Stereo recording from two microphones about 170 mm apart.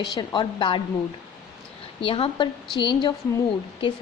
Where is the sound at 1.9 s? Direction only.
35° left (ahead or behind).